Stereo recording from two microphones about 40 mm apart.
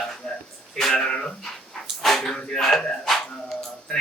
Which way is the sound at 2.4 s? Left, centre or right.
Centre.